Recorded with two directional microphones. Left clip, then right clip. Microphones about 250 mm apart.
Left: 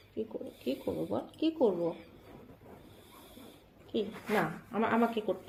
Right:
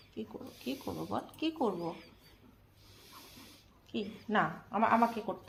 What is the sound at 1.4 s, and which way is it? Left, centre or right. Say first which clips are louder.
Speech: left 5 dB; right.